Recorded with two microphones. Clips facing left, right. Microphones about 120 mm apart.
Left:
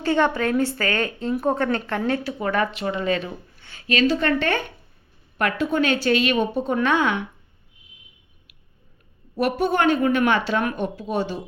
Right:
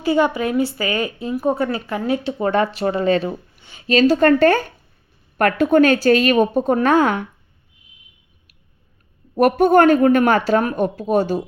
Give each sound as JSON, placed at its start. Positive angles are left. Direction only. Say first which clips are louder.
{"t": 0.0, "sound": "a woman's voice", "louder": "right 3 dB", "side_deg": -10}
{"t": 2.2, "sound": "speech", "louder": "right 5 dB", "side_deg": -25}
{"t": 3.5, "sound": "a sound", "louder": "right 1 dB", "side_deg": -15}
{"t": 3.8, "sound": "speech", "louder": "right 7 dB", "side_deg": -35}
{"t": 5.4, "sound": "speech", "louder": "right 8 dB", "side_deg": -50}
{"t": 9.3, "sound": "speech", "louder": "right 9 dB", "side_deg": -50}